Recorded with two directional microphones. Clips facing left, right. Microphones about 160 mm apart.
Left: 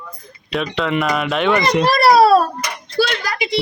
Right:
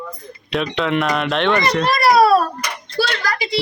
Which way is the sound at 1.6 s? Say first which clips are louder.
Left 2 dB; 20° left (ahead or behind).